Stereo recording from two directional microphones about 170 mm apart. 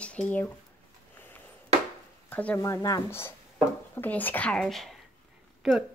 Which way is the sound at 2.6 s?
20° left (ahead or behind).